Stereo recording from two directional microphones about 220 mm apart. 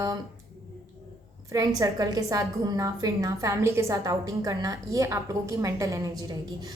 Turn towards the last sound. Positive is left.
turn(degrees=-15)  # may be behind; listen again after turning